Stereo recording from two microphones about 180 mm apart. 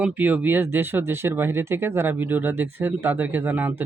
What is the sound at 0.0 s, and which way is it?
Speech, 10° right (ahead or behind).